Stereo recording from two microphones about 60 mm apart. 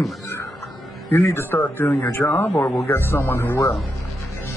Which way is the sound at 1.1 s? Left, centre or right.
Left.